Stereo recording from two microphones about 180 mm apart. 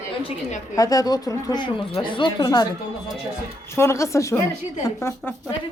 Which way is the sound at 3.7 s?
15° left (ahead or behind).